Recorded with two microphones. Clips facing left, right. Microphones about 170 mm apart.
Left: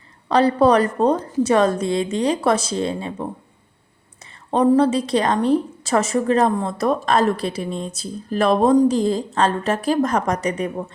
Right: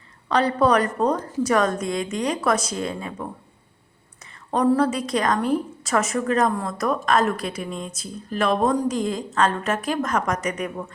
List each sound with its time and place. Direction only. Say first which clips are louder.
0.3 s a woman's voice: left 4 dB; 30° left (ahead or behind)
4.5 s a woman's voice: left 4 dB; 25° left (ahead or behind)